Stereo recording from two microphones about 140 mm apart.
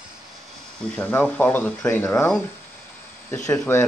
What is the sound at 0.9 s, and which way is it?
Speech, 10° left (ahead or behind).